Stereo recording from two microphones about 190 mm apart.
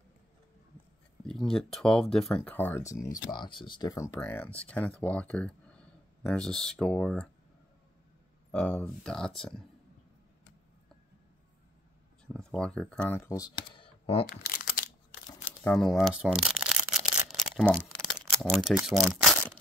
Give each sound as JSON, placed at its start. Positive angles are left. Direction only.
{"t": 1.2, "sound": "speech", "side_deg": 5}
{"t": 8.5, "sound": "speech", "side_deg": 5}
{"t": 12.3, "sound": "speech", "side_deg": 5}
{"t": 13.7, "sound": "computer keyboard", "side_deg": 30}
{"t": 14.3, "sound": "crumpling", "side_deg": 50}
{"t": 15.6, "sound": "speech", "side_deg": 5}
{"t": 17.7, "sound": "a sound", "side_deg": 5}
{"t": 18.9, "sound": "speech", "side_deg": 0}